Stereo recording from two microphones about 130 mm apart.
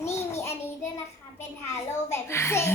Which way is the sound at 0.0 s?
20° left (ahead or behind).